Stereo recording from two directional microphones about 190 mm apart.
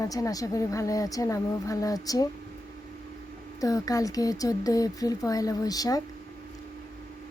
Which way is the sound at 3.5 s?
20° left (ahead or behind).